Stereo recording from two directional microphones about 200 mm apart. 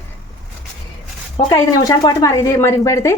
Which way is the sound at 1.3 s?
20° left (ahead or behind).